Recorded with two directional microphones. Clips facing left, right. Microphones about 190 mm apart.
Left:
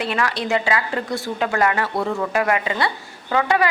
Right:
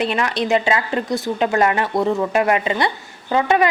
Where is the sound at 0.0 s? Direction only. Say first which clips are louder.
Right 3 dB; 20° right (ahead or behind).